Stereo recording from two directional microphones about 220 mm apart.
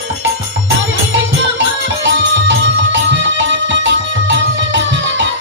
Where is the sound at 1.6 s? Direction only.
55° right (ahead or behind).